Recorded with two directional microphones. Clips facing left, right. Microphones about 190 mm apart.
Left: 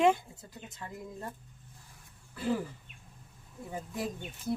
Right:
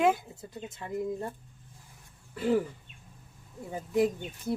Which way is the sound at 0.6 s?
25° right (ahead or behind).